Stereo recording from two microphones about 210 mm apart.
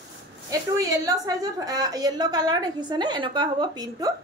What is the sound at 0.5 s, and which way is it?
A woman's voice, 15° right (ahead or behind).